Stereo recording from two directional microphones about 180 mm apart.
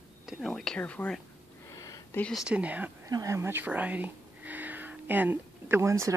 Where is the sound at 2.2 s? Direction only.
Centre (ahead or behind).